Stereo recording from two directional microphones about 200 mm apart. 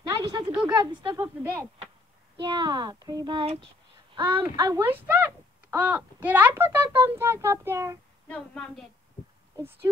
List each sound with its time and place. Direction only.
0.0 s a sound: 20° right (ahead or behind)
2.4 s speech: 20° right (ahead or behind)
4.1 s child singing: 25° right (ahead or behind)
4.6 s a child's voice: 10° right (ahead or behind)
8.3 s a woman's voice: 5° left (ahead or behind)